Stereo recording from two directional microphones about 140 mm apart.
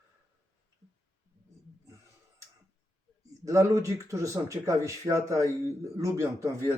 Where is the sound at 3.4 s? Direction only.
20° right (ahead or behind).